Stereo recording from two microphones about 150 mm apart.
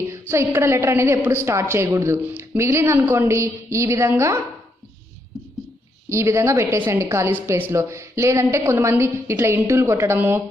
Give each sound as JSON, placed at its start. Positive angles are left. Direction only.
{"t": 0.1, "sound": "a woman's voice", "side_deg": -20}
{"t": 6.0, "sound": "a woman's voice", "side_deg": -20}